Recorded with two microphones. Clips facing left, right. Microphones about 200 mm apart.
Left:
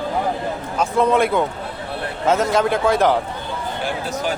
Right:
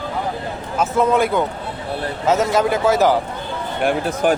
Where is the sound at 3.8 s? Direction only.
55° right (ahead or behind).